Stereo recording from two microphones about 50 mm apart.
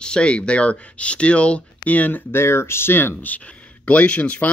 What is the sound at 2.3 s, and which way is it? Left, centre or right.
Speech, left.